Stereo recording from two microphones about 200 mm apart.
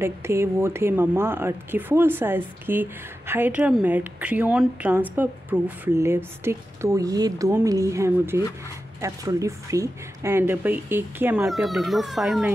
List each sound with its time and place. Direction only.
0.0 s speech: 15° right (ahead or behind)